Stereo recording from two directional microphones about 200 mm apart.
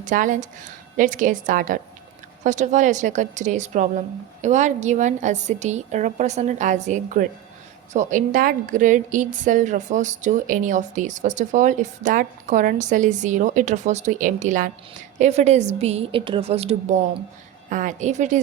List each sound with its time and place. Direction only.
0.0 s a woman's voice: 40° right (ahead or behind)